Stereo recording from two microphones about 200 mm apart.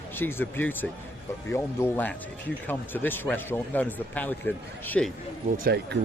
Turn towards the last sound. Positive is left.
turn(degrees=-55)  # may be behind; listen again after turning